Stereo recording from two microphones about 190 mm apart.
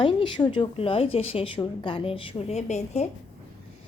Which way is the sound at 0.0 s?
25° left (ahead or behind).